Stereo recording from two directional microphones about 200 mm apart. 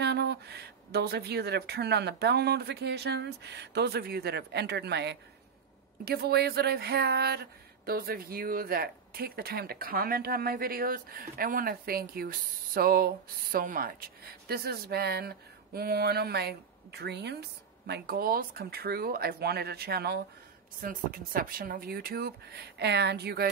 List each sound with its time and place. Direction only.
0.0 s speech: 55° right (ahead or behind)